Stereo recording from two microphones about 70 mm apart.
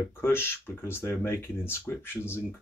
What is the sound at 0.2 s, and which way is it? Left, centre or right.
Speech, left.